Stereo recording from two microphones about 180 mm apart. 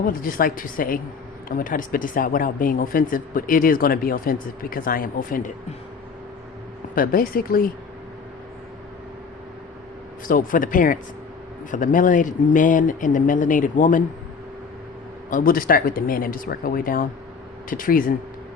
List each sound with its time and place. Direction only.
0.0 s speech: 50° left (ahead or behind)
6.9 s speech: 55° left (ahead or behind)
10.2 s speech: 50° left (ahead or behind)
15.3 s speech: 50° left (ahead or behind)